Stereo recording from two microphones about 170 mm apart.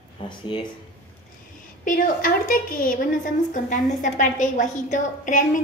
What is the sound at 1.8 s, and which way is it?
A woman's voice, 55° left (ahead or behind).